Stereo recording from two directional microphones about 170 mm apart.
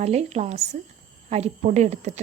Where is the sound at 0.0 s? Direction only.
40° right (ahead or behind).